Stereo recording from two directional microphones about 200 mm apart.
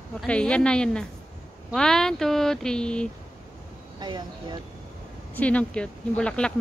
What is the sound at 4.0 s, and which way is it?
Speech, 20° right (ahead or behind).